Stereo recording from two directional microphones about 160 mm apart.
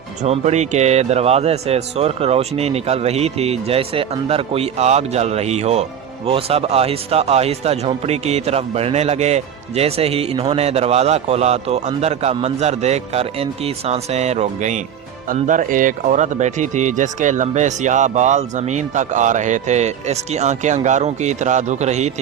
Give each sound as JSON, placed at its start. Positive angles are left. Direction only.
{"t": 0.2, "sound": "a man's voice", "side_deg": -45}